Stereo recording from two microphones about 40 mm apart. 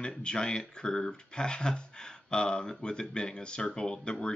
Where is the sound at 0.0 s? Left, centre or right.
Left.